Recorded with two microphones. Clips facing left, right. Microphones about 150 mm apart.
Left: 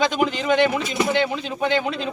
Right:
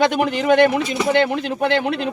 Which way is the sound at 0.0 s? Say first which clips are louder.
Right 3 dB; 60° right (ahead or behind).